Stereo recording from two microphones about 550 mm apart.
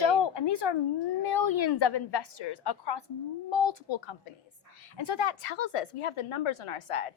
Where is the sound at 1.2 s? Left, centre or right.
Left.